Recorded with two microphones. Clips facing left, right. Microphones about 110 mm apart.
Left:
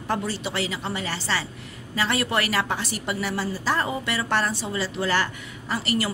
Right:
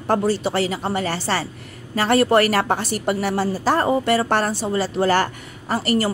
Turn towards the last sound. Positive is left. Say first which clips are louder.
# right 6 dB
turn(degrees=-45)  # may be behind; listen again after turning